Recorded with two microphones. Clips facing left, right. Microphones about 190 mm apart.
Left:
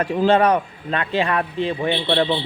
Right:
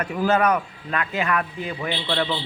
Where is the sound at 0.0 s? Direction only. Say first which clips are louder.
Left 4 dB; 30° left (ahead or behind).